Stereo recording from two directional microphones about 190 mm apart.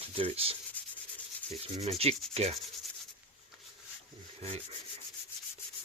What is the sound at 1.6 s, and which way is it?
Speech, 30° right (ahead or behind).